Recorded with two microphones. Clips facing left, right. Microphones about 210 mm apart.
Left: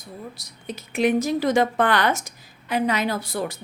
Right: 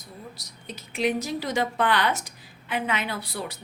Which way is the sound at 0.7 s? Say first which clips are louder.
Left 5 dB; 50° left (ahead or behind).